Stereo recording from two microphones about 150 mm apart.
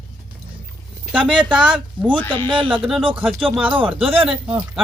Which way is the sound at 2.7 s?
5° right (ahead or behind).